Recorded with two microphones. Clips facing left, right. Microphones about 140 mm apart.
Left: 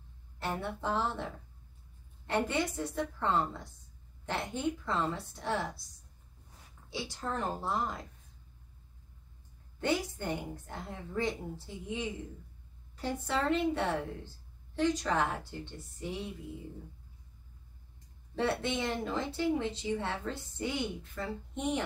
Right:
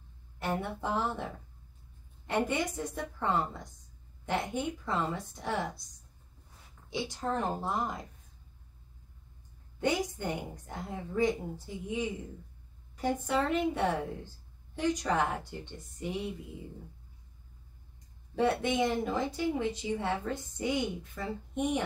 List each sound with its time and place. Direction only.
0.5 s speech: 15° right (ahead or behind)
2.2 s speech: 15° right (ahead or behind)
6.9 s a woman's voice: 20° right (ahead or behind)
9.8 s speech: 15° right (ahead or behind)
18.3 s speech: 15° right (ahead or behind)